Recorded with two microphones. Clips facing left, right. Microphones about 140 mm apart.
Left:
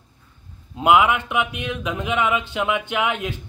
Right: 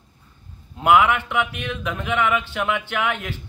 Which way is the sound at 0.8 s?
20° left (ahead or behind).